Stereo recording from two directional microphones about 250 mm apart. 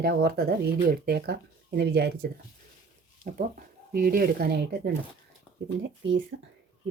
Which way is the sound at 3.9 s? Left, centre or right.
Right.